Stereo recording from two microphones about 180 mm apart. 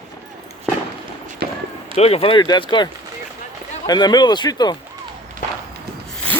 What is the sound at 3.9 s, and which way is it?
Speech, 20° left (ahead or behind).